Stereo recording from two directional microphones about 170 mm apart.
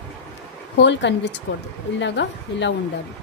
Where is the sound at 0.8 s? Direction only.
90° left.